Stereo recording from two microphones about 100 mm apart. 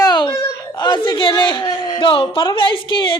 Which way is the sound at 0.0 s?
45° left (ahead or behind).